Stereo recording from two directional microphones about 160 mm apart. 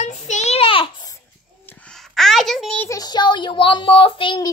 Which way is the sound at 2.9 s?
25° left (ahead or behind).